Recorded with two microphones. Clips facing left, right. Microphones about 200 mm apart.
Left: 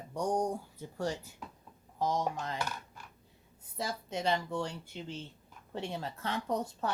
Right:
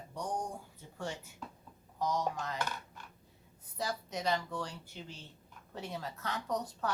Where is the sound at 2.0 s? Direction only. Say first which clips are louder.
Left 2 dB; 25° left (ahead or behind).